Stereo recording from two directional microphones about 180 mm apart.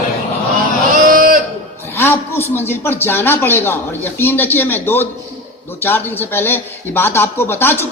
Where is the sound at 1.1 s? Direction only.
50° right (ahead or behind).